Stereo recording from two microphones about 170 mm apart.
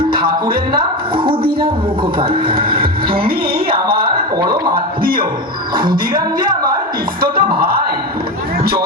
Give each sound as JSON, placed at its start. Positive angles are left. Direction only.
{"t": 0.1, "sound": "speech", "side_deg": -60}
{"t": 0.8, "sound": "speech", "side_deg": -30}
{"t": 1.5, "sound": "speech", "side_deg": -60}
{"t": 2.1, "sound": "speech", "side_deg": -30}
{"t": 4.0, "sound": "a man's voice", "side_deg": -25}
{"t": 5.7, "sound": "speech", "side_deg": -60}